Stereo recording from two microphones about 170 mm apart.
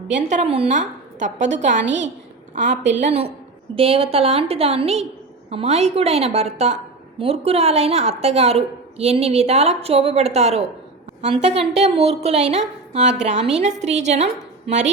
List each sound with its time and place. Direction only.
0.1 s a woman's voice: 45° right (ahead or behind)
1.8 s a woman's voice: 90° right
3.0 s a woman's voice: 35° right (ahead or behind)